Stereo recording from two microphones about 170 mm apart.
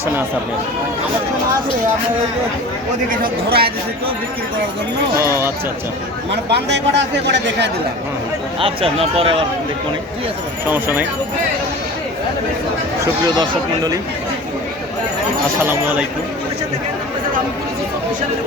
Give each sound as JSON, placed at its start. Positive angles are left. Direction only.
{"t": 3.1, "sound": "speech", "side_deg": -60}
{"t": 5.1, "sound": "speech", "side_deg": -15}
{"t": 6.3, "sound": "a man's voice", "side_deg": -85}
{"t": 8.6, "sound": "speech", "side_deg": -35}
{"t": 10.7, "sound": "speech", "side_deg": -10}
{"t": 13.2, "sound": "speech", "side_deg": -25}
{"t": 15.6, "sound": "speech", "side_deg": -10}